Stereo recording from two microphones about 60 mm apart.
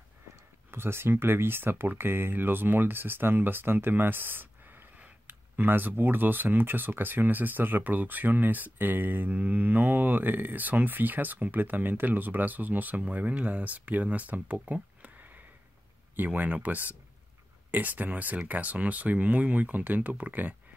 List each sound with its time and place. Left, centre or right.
0.7 s speech: right
16.2 s speech: right